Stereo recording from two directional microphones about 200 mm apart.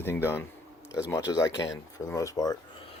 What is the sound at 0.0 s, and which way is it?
Speech, 10° left (ahead or behind).